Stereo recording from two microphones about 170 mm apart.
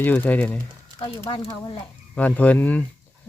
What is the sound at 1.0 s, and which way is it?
Speech, 30° left (ahead or behind).